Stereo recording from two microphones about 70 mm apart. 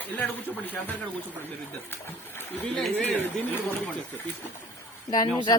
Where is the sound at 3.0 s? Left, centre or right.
Left.